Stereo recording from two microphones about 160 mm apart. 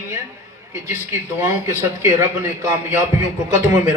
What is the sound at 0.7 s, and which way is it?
A man's voice, 15° right (ahead or behind).